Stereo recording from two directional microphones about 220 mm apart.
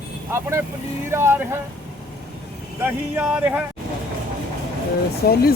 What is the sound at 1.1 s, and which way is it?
Speech, 10° right (ahead or behind).